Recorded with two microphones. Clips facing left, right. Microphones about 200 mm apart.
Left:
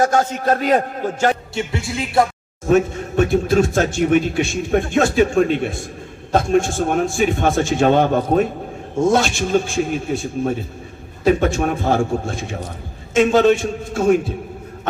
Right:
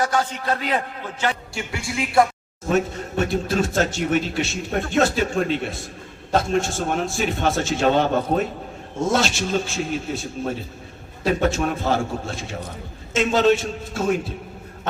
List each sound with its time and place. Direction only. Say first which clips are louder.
0.0 s speech: left 6 dB; 45° left (ahead or behind)
2.6 s speech: left 6 dB; 50° left (ahead or behind)